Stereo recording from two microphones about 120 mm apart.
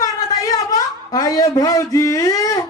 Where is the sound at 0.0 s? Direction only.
30° left (ahead or behind).